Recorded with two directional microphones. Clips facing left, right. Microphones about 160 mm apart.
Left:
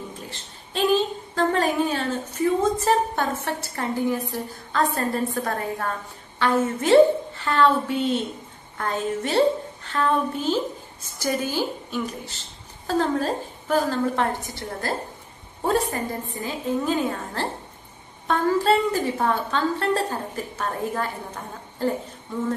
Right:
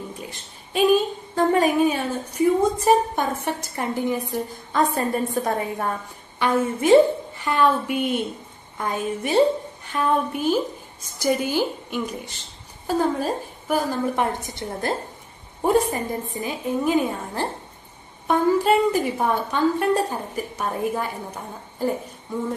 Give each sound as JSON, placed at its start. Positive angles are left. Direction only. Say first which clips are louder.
{"t": 0.3, "sound": "a woman's voice", "louder": "right 4 dB", "side_deg": -10}